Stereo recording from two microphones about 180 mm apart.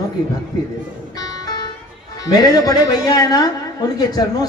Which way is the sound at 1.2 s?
20° left (ahead or behind).